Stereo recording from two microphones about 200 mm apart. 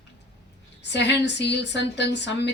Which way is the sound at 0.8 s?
60° left (ahead or behind).